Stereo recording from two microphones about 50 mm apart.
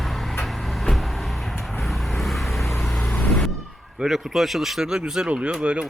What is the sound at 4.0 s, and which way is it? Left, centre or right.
Speech, centre.